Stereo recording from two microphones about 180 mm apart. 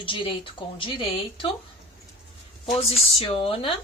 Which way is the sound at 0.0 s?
30° left (ahead or behind).